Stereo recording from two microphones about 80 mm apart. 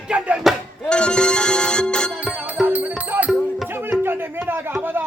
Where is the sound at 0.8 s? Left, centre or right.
Centre.